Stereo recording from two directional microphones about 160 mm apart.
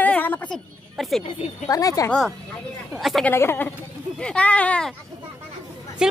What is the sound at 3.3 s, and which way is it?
Speech, 15° left (ahead or behind).